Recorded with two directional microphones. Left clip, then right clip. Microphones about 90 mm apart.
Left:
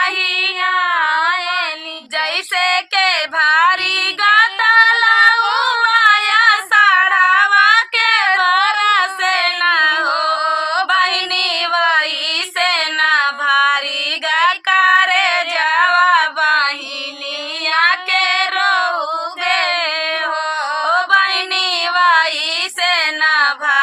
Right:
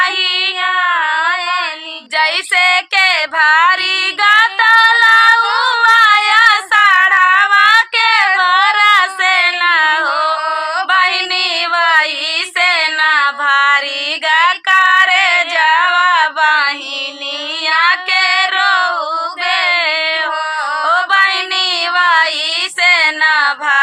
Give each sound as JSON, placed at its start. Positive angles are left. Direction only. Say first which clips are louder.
{"t": 0.0, "sound": "child singing", "louder": "right 2 dB", "side_deg": -30}
{"t": 0.9, "sound": "a sound", "louder": "right 1 dB", "side_deg": 45}
{"t": 2.1, "sound": "female singing", "louder": "right 5 dB", "side_deg": -20}
{"t": 7.9, "sound": "child singing", "louder": "right 2 dB", "side_deg": -25}
{"t": 8.4, "sound": "singing", "louder": "right 3 dB", "side_deg": -25}
{"t": 10.2, "sound": "mantra", "louder": "right 1 dB", "side_deg": 45}
{"t": 10.9, "sound": "female singing", "louder": "right 5 dB", "side_deg": -30}
{"t": 18.3, "sound": "child singing", "louder": "right 3 dB", "side_deg": -25}
{"t": 19.5, "sound": "female singing", "louder": "right 3 dB", "side_deg": -20}
{"t": 20.9, "sound": "a sound", "louder": "right 2 dB", "side_deg": -25}
{"t": 22.8, "sound": "female singing", "louder": "right 5 dB", "side_deg": -20}